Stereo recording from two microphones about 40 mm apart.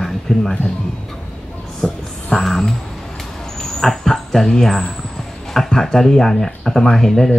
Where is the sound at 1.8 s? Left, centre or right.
Centre.